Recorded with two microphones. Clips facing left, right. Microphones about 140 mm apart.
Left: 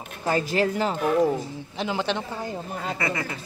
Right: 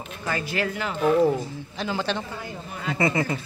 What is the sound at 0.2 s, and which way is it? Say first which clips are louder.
Speech: left 5 dB; 40° left (ahead or behind).